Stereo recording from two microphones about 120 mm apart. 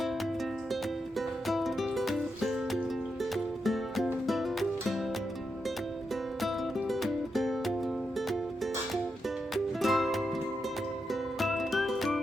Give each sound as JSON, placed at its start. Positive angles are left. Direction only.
{"t": 1.5, "sound": "music", "side_deg": 0}
{"t": 6.4, "sound": "music", "side_deg": 0}
{"t": 9.8, "sound": "music", "side_deg": 0}